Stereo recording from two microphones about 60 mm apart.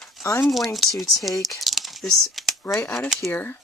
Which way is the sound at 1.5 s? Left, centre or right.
Centre.